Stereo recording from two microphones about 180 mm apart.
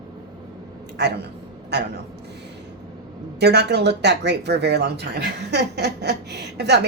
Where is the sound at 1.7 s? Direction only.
70° right (ahead or behind).